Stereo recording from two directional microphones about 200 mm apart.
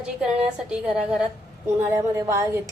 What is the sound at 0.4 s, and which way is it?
A woman's voice, 5° right (ahead or behind).